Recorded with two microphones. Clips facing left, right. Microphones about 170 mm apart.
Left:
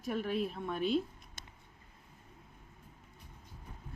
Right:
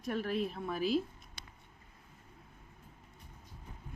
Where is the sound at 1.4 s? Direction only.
45° left (ahead or behind).